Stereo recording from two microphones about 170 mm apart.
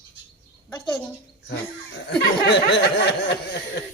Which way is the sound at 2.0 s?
90° left.